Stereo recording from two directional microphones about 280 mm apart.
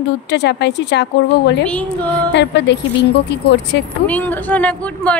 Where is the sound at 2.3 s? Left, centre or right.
Left.